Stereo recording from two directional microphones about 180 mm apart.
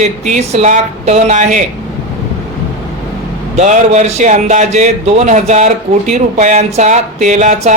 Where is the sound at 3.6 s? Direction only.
40° right (ahead or behind).